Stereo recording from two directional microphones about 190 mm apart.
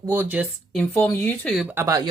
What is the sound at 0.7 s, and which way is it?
Speech, 10° left (ahead or behind).